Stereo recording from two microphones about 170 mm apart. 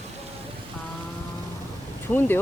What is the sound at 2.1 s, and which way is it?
Speech, 10° left (ahead or behind).